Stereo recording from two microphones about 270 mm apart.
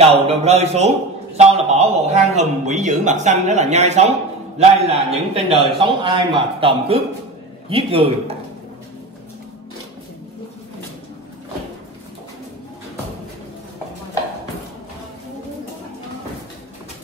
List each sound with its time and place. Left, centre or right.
0.0 s a man's voice: right